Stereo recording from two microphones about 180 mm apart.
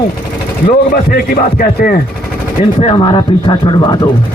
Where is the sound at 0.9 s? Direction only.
55° left (ahead or behind).